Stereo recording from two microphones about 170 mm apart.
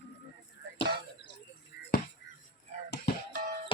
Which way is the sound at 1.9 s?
60° left (ahead or behind).